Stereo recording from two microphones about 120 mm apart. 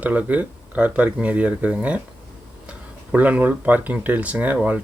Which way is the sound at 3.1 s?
10° right (ahead or behind).